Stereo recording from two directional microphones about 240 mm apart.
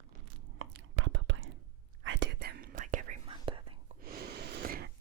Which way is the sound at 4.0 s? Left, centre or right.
Right.